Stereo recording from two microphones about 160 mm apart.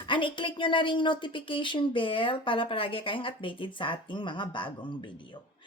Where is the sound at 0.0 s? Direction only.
30° left (ahead or behind).